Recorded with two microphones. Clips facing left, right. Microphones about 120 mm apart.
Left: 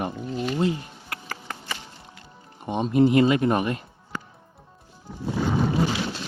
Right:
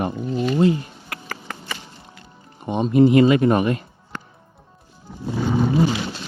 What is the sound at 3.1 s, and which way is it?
Speech, 90° right.